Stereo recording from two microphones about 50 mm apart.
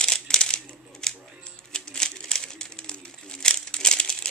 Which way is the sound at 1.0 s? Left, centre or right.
Centre.